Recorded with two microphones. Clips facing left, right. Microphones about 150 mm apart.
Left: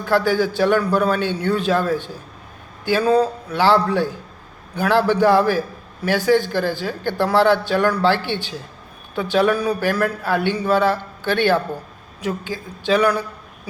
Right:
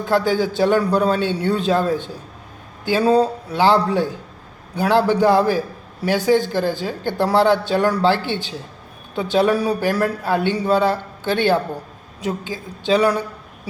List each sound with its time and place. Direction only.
0.0 s speech: 20° right (ahead or behind)